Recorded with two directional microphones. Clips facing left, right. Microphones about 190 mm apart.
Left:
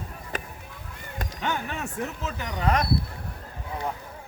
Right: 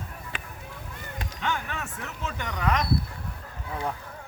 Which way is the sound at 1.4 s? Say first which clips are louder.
Left 1 dB; 20° left (ahead or behind).